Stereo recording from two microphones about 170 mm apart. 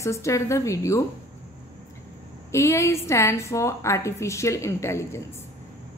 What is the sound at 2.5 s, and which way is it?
A woman's voice, 15° left (ahead or behind).